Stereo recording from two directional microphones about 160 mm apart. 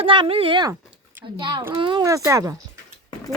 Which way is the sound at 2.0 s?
20° right (ahead or behind).